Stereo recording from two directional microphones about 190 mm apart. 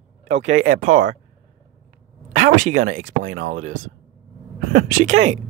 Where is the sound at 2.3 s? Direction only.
40° right (ahead or behind).